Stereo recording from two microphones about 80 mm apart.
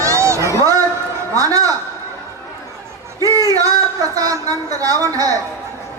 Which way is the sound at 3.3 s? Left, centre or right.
Right.